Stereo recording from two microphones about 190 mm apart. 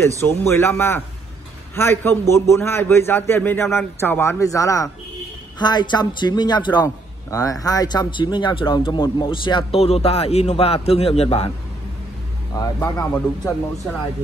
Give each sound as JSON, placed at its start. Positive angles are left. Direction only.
{"t": 0.2, "sound": "a man's voice", "side_deg": 15}
{"t": 13.0, "sound": "a man's voice", "side_deg": 5}